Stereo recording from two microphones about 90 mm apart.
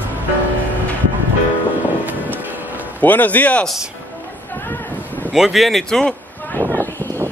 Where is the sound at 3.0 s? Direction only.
20° left (ahead or behind).